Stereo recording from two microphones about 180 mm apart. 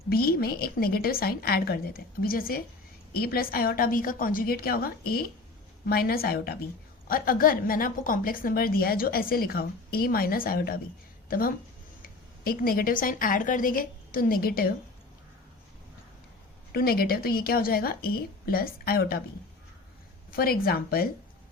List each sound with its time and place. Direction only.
0.1 s a woman's voice: 55° left (ahead or behind)
16.7 s speech: 60° left (ahead or behind)
20.3 s speech: 55° left (ahead or behind)